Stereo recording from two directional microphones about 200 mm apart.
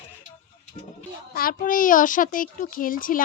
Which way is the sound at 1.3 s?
45° left (ahead or behind).